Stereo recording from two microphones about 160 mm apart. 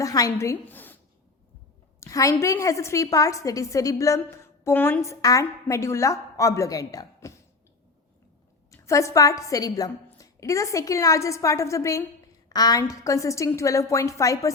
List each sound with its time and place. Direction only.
0.0 s a woman's voice: 20° left (ahead or behind)
2.0 s a woman's voice: 20° left (ahead or behind)
8.7 s a woman's voice: 20° left (ahead or behind)